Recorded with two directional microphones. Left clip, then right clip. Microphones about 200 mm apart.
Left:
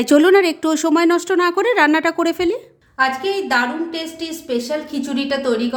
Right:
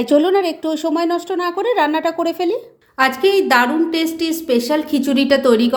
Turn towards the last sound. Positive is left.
turn(degrees=-35)  # may be behind; listen again after turning